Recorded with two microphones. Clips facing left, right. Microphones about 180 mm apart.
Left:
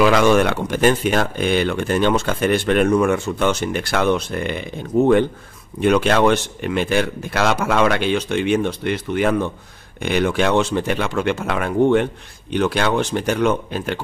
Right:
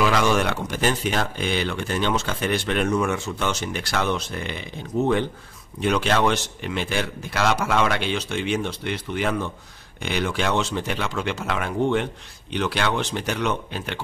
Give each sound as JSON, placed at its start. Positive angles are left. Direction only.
{"t": 0.0, "sound": "speech", "side_deg": 55}